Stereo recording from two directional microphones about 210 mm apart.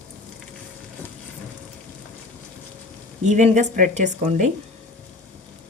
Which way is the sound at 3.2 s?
35° right (ahead or behind).